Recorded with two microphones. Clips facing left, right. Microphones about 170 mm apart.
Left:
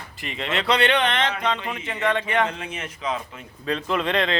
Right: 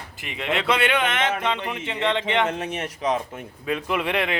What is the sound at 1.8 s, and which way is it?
Speech, 20° right (ahead or behind).